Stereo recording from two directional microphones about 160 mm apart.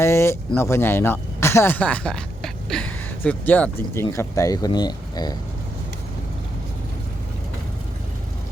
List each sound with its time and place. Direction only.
0.0 s speech: 15° left (ahead or behind)